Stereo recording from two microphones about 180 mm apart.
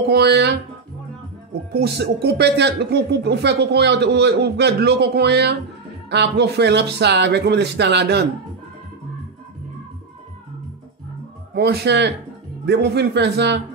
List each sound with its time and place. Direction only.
0.1 s speech: 65° right (ahead or behind)
11.5 s speech: 60° right (ahead or behind)